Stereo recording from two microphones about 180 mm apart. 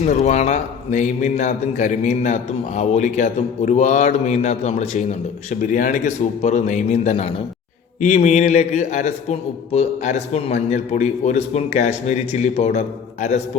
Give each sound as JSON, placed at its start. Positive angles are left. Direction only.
{"t": 0.0, "sound": "a man's voice", "side_deg": 40}